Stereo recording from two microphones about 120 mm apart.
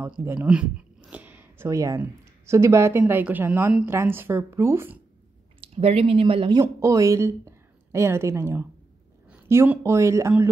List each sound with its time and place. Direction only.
0.2 s speech: 15° right (ahead or behind)
5.6 s speech: 55° right (ahead or behind)
6.6 s a woman's voice: 25° right (ahead or behind)